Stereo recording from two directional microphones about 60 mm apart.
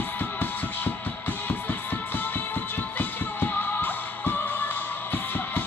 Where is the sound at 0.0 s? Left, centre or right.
Left.